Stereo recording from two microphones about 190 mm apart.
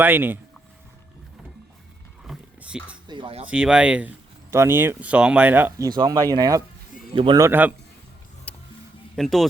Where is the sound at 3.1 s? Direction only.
25° right (ahead or behind).